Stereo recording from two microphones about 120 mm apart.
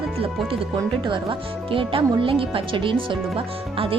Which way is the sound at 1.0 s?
45° right (ahead or behind).